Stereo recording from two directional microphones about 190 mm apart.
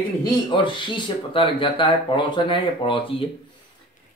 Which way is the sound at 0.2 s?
25° left (ahead or behind).